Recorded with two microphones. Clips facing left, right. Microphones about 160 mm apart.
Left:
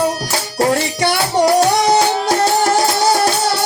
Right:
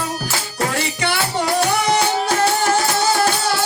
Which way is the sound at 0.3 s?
40° left (ahead or behind).